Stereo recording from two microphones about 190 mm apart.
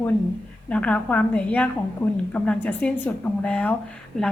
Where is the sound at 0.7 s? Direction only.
5° left (ahead or behind).